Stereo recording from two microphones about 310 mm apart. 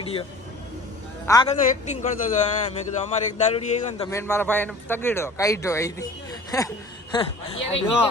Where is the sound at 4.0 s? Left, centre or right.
Centre.